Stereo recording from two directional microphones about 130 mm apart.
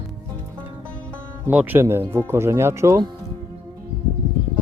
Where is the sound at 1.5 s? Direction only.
10° right (ahead or behind).